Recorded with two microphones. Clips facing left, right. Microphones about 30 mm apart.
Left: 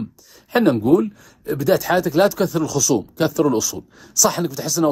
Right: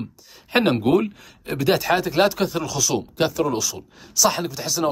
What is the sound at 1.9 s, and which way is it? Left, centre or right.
Speech, right.